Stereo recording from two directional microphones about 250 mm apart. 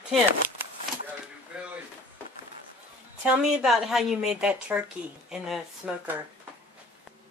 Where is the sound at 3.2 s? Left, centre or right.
Centre.